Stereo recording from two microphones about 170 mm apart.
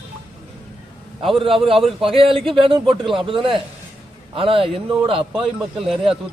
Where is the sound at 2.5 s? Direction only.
30° right (ahead or behind).